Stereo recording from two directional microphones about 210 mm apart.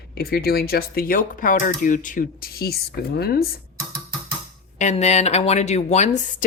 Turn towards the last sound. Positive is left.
turn(degrees=35)  # may be behind; listen again after turning